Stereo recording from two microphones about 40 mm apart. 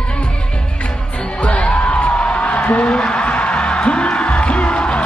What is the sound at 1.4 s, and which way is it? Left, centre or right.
Music, left.